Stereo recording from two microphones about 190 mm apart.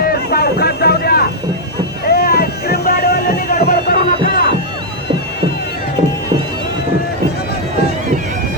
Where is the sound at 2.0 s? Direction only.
60° left (ahead or behind).